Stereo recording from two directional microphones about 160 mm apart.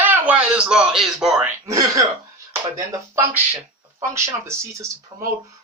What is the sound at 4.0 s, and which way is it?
Speech, 15° right (ahead or behind).